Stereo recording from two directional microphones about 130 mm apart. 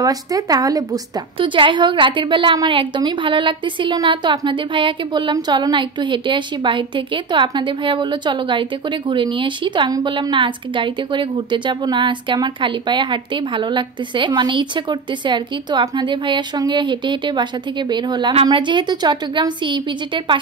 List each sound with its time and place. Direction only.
0.0 s speech: 30° right (ahead or behind)
1.4 s a woman's voice: 40° right (ahead or behind)